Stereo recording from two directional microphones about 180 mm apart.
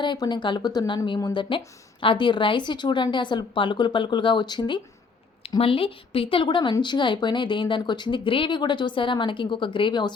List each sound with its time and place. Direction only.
0.0 s speech: 25° left (ahead or behind)